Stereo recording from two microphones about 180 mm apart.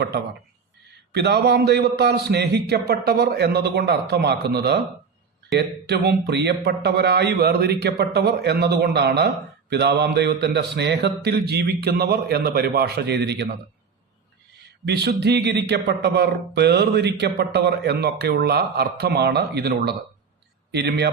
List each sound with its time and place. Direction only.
1.1 s a man's voice: 70° right (ahead or behind)
14.8 s speech: 65° right (ahead or behind)